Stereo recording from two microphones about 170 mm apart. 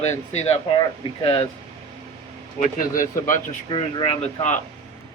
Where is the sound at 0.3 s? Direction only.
35° left (ahead or behind).